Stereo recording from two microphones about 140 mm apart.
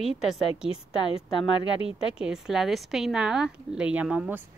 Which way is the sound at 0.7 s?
45° left (ahead or behind).